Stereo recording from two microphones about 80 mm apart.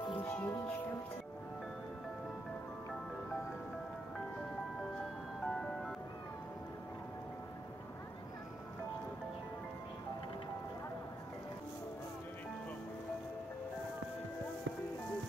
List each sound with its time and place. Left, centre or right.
0.2 s music: left
5.4 s music: centre